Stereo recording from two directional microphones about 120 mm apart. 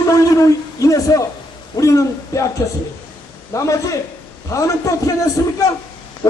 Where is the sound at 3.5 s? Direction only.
25° left (ahead or behind).